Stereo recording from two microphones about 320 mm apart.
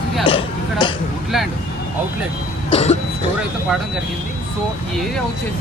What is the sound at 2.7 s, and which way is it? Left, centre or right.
Speech, centre.